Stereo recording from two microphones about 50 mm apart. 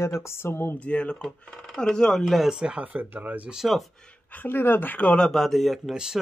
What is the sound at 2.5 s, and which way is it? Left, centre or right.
Speech, centre.